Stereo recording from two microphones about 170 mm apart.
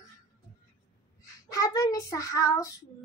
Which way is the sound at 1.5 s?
20° left (ahead or behind).